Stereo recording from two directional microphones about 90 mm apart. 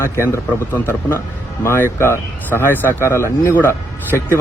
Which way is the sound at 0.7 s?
25° left (ahead or behind).